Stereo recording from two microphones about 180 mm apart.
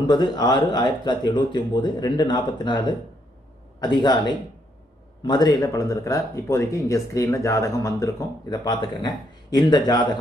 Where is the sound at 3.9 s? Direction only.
25° left (ahead or behind).